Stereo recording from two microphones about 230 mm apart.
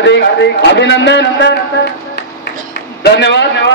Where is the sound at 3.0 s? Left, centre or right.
Left.